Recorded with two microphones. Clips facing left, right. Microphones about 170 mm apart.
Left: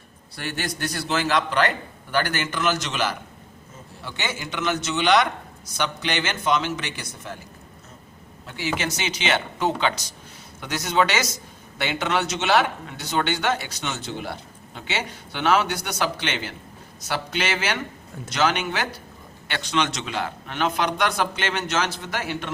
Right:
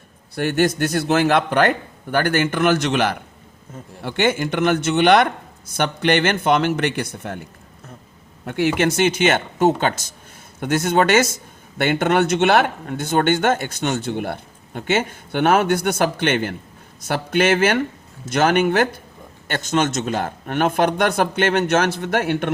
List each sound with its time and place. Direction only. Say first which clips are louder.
0.3 s speech: right 12 dB; 50° right (ahead or behind)
8.4 s speech: right 9 dB; 55° right (ahead or behind)